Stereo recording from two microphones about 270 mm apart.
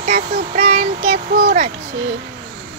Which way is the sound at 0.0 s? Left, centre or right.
Right.